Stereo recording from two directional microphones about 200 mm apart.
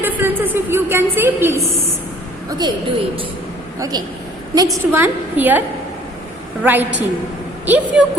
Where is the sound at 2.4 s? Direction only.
20° right (ahead or behind).